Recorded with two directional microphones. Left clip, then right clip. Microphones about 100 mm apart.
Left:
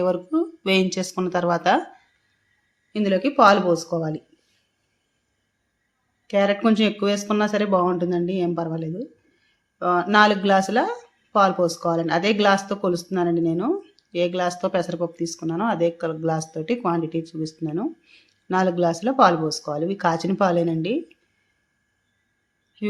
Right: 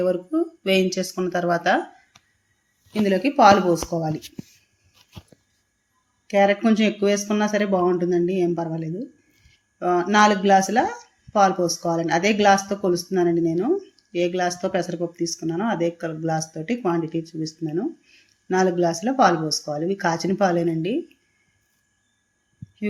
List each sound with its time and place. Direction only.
0.0 s speech: 40° left (ahead or behind)
2.9 s speech: 25° left (ahead or behind)
6.2 s speech: 30° left (ahead or behind)